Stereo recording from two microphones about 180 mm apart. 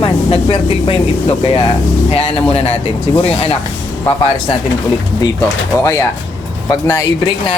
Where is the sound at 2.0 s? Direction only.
35° left (ahead or behind).